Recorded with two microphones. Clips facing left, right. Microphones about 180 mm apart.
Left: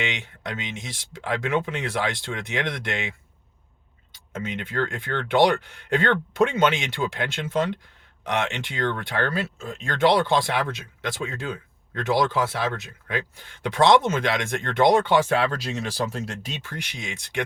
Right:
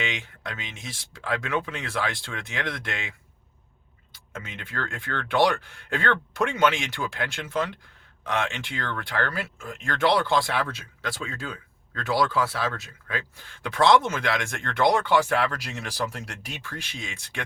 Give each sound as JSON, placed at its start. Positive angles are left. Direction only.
{"t": 0.0, "sound": "speech", "side_deg": 20}
{"t": 4.3, "sound": "speech", "side_deg": 20}